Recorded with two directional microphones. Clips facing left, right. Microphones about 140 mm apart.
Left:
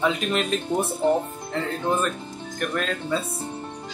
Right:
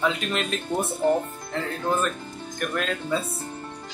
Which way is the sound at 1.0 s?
20° left (ahead or behind).